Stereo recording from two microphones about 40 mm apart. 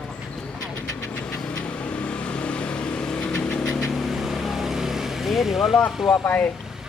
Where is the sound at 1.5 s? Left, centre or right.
Left.